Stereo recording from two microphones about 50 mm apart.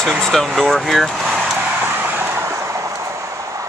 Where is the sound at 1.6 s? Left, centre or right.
Right.